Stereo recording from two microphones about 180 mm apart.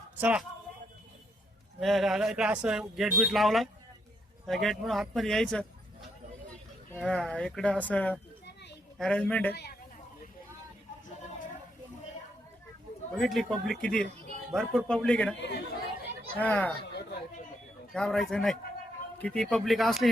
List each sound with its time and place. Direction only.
0.2 s a man's voice: 5° right (ahead or behind)
1.8 s speech: centre (ahead or behind)
6.9 s a man's voice: 5° left (ahead or behind)
13.1 s speech: centre (ahead or behind)
15.4 s speech: 70° left (ahead or behind)
16.4 s a man's voice: 10° left (ahead or behind)
16.9 s chatter: 65° left (ahead or behind)
17.9 s speech: 5° left (ahead or behind)